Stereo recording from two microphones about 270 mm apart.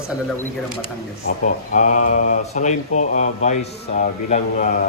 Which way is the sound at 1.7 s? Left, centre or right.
Left.